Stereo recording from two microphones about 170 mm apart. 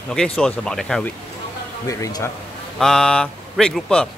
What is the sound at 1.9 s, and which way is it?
Speech, 20° left (ahead or behind).